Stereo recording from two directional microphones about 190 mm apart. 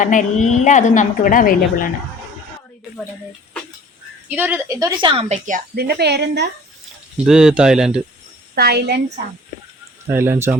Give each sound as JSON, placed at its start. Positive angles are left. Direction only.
{"t": 0.0, "sound": "a woman's voice", "side_deg": 40}
{"t": 4.3, "sound": "a woman's voice", "side_deg": -10}
{"t": 5.3, "sound": "speech", "side_deg": -45}
{"t": 7.3, "sound": "speech", "side_deg": -5}
{"t": 8.5, "sound": "speech", "side_deg": -55}
{"t": 10.1, "sound": "a woman's voice", "side_deg": -10}